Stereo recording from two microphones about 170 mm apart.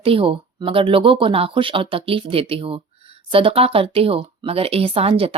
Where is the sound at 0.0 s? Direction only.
35° right (ahead or behind).